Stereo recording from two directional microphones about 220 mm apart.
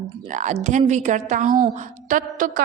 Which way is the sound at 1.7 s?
35° right (ahead or behind).